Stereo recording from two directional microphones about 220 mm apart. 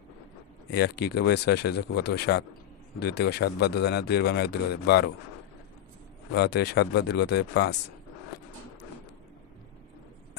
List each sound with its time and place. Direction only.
0.7 s speech: 45° left (ahead or behind)
6.3 s speech: 50° left (ahead or behind)